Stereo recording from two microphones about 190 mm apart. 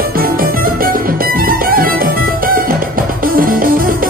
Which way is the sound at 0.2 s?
50° right (ahead or behind).